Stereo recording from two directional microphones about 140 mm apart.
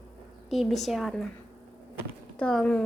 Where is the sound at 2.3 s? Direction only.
5° left (ahead or behind).